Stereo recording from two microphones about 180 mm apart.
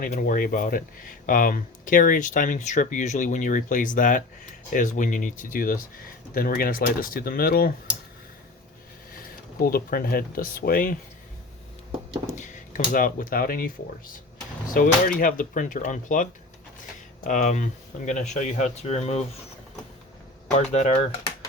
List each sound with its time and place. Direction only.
0.0 s speech: 50° left (ahead or behind)
9.1 s speech: 55° left (ahead or behind)
12.4 s speech: 45° left (ahead or behind)
14.7 s speech: 50° left (ahead or behind)
20.7 s speech: 40° left (ahead or behind)